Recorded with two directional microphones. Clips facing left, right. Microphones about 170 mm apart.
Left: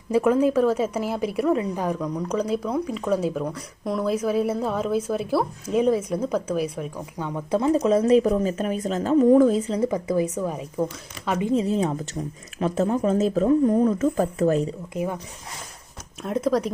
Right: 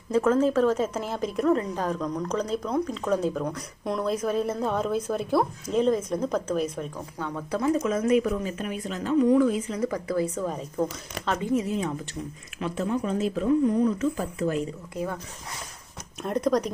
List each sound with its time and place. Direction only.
0.1 s a woman's voice: 15° left (ahead or behind)
11.5 s speech: 35° left (ahead or behind)
14.9 s a woman's voice: 15° left (ahead or behind)
16.2 s speech: 5° left (ahead or behind)